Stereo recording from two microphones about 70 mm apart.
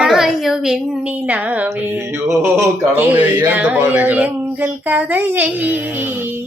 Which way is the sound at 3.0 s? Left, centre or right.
Right.